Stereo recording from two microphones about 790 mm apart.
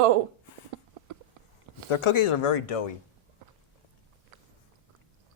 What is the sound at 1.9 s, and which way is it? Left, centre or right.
Speech, left.